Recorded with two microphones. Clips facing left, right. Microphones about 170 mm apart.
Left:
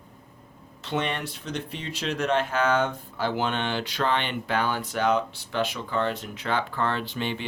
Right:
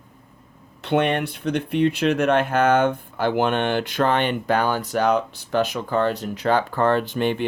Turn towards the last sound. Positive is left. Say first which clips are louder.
# right 9 dB
turn(degrees=-50)  # may be behind; listen again after turning